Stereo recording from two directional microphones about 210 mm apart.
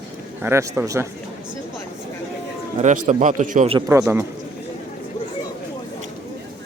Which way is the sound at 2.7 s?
35° right (ahead or behind).